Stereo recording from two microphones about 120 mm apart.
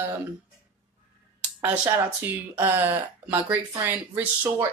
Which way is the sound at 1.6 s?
20° right (ahead or behind).